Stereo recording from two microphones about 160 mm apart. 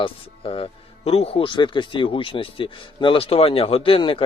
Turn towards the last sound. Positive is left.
turn(degrees=35)  # may be behind; listen again after turning